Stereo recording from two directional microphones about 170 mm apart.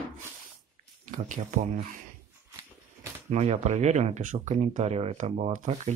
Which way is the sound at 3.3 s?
40° right (ahead or behind).